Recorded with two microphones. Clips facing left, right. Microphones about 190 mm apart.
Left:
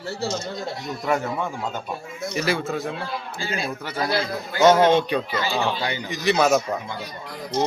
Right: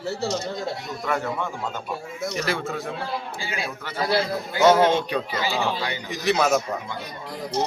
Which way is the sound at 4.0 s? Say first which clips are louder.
Right 2 dB; 30° right (ahead or behind).